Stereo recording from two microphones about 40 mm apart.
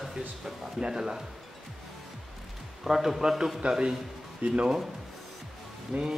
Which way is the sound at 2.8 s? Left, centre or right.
Centre.